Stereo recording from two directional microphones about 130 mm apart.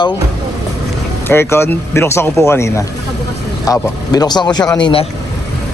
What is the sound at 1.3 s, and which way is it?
Speech, 20° left (ahead or behind).